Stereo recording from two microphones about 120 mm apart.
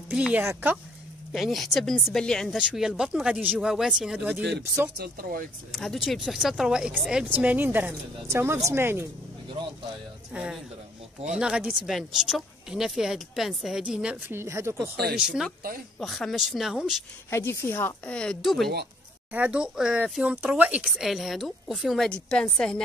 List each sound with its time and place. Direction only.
0.1 s speech: 5° right (ahead or behind)
1.3 s speech: centre (ahead or behind)
5.7 s speech: centre (ahead or behind); by 9.1 s 20° right (ahead or behind)
10.3 s speech: 10° right (ahead or behind)
14.2 s speech: 20° right (ahead or behind)
14.8 s speech: 5° right (ahead or behind)
17.3 s a woman's voice: 20° left (ahead or behind); by 18.7 s centre (ahead or behind)
19.3 s speech: 10° right (ahead or behind); by 22.8 s 5° left (ahead or behind)